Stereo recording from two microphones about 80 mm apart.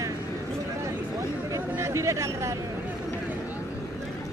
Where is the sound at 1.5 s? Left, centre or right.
Right.